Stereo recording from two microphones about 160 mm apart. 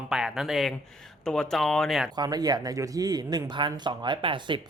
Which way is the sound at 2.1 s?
25° right (ahead or behind).